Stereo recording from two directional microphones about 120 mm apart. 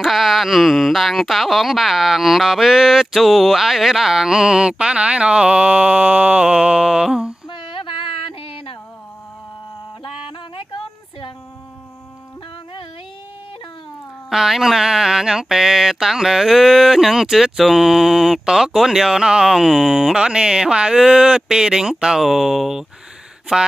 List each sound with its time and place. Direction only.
0.0 s mantra: centre (ahead or behind)
7.4 s female singing: 45° left (ahead or behind)
10.0 s a sound: 50° left (ahead or behind)
14.3 s mantra: 5° right (ahead or behind)